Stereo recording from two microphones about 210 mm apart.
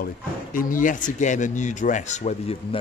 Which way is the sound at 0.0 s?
40° left (ahead or behind).